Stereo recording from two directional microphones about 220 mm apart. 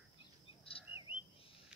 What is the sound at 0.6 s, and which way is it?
Chirp, 25° left (ahead or behind).